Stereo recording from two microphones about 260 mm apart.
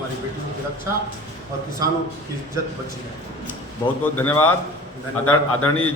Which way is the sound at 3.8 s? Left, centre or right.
Centre.